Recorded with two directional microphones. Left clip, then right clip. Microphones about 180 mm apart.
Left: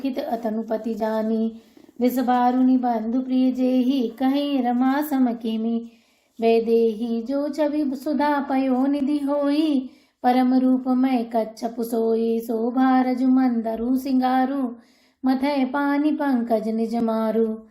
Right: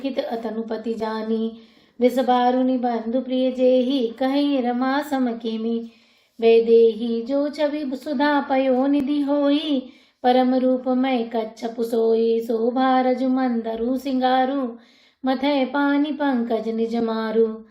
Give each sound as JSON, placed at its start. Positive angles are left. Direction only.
{"t": 0.0, "sound": "speech", "side_deg": 45}